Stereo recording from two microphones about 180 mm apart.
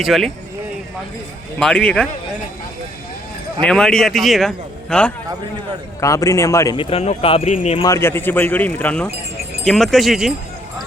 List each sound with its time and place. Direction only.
0.0 s a man's voice: centre (ahead or behind)
1.5 s a man's voice: 5° left (ahead or behind)
3.6 s a man's voice: 5° left (ahead or behind)
6.0 s speech: 15° left (ahead or behind)
6.7 s speech: 35° left (ahead or behind)
7.8 s a man's voice: 15° left (ahead or behind); by 10.3 s centre (ahead or behind)